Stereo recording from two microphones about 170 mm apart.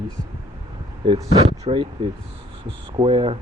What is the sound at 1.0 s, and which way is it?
Speech, 30° right (ahead or behind).